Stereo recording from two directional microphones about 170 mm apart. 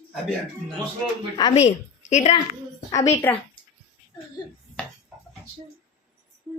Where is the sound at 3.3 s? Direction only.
10° left (ahead or behind).